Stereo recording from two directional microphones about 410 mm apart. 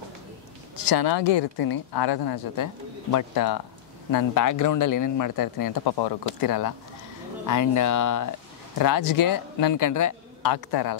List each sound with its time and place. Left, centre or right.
0.8 s a woman's voice: left